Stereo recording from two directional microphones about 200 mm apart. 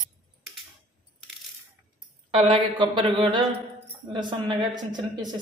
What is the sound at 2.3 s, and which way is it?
A woman's voice, 25° right (ahead or behind).